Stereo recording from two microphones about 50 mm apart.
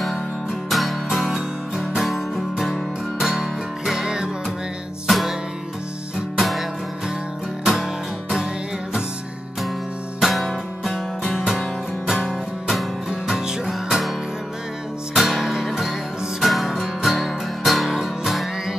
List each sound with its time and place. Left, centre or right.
0.7 s music: centre
6.3 s music: centre
7.6 s music: centre
11.2 s music: centre
15.1 s music: centre